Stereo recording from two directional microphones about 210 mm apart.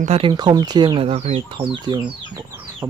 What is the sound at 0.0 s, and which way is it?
Speech, 25° right (ahead or behind).